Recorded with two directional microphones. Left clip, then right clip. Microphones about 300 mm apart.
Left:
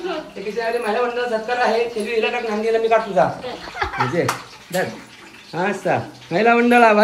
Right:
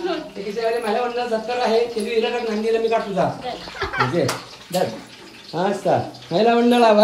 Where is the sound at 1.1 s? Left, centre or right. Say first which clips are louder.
Left 1 dB; centre.